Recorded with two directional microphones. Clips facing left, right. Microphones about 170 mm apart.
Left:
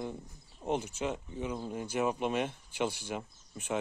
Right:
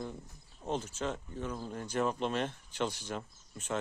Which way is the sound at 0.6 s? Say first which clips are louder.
Left 2 dB; 15° left (ahead or behind).